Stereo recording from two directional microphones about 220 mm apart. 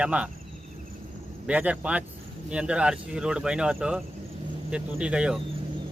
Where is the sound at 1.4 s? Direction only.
5° right (ahead or behind).